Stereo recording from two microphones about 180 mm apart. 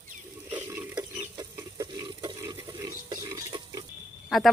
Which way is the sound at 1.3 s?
20° right (ahead or behind).